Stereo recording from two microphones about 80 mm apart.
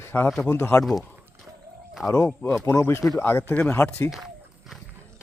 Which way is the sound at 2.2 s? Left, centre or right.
Left.